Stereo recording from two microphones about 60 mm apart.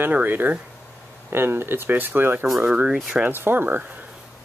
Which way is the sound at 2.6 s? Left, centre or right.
Right.